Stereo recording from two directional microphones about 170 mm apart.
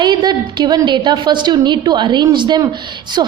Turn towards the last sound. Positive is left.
turn(degrees=-25)  # may be behind; listen again after turning